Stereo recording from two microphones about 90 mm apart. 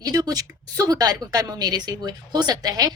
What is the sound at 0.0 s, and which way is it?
A woman's voice, 45° right (ahead or behind).